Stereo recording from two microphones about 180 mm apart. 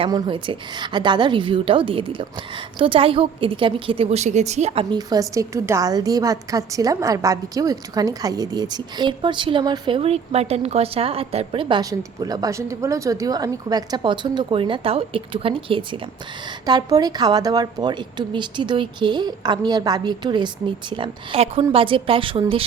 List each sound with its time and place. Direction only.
0.0 s a woman's voice: 30° right (ahead or behind)